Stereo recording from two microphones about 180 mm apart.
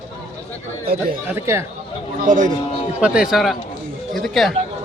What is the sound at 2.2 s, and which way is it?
Speech, 45° right (ahead or behind).